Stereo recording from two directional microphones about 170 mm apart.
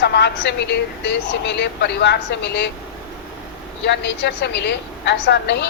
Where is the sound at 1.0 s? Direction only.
80° left.